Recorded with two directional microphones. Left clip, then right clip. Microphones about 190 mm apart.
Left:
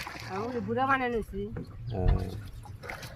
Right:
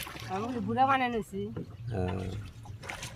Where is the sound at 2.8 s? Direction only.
45° left (ahead or behind).